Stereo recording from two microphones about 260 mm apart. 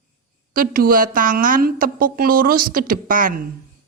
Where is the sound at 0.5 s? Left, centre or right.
Right.